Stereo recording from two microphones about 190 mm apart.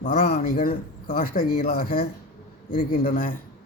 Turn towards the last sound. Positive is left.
turn(degrees=50)  # may be behind; listen again after turning